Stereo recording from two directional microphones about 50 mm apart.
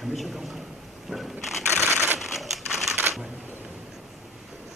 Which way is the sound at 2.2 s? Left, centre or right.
Centre.